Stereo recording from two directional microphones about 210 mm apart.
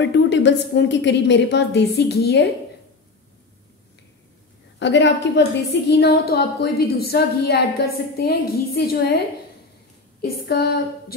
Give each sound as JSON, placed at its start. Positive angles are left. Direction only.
{"t": 0.0, "sound": "a woman's voice", "side_deg": 55}
{"t": 4.7, "sound": "a woman's voice", "side_deg": 60}
{"t": 10.2, "sound": "a woman's voice", "side_deg": 45}